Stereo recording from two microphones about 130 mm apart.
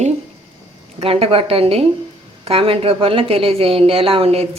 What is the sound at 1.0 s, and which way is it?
A woman's voice, 50° right (ahead or behind).